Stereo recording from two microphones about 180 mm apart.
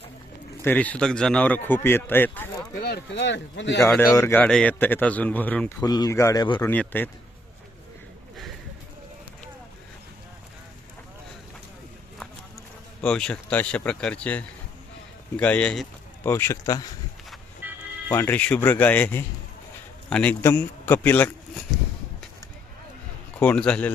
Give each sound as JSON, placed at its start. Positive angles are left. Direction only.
{"t": 0.6, "sound": "a man's voice", "side_deg": 10}
{"t": 2.8, "sound": "speech", "side_deg": 70}
{"t": 3.8, "sound": "a man's voice", "side_deg": 15}
{"t": 5.8, "sound": "a man's voice", "side_deg": 20}
{"t": 6.7, "sound": "a man's voice", "side_deg": 10}
{"t": 13.0, "sound": "a man's voice", "side_deg": 5}
{"t": 17.6, "sound": "music", "side_deg": -10}
{"t": 18.1, "sound": "a man's voice", "side_deg": 10}
{"t": 23.4, "sound": "a man's voice", "side_deg": 5}